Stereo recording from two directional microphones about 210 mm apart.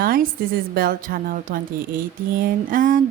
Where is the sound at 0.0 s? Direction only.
45° right (ahead or behind).